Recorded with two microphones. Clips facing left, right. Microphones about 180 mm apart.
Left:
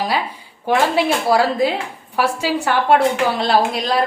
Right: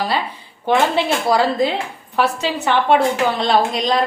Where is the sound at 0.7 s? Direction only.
10° left (ahead or behind).